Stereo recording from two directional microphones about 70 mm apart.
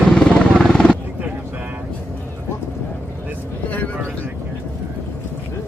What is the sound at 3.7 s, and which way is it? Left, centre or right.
Vehicle, left.